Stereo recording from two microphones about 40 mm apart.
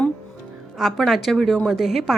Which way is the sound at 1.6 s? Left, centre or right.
Centre.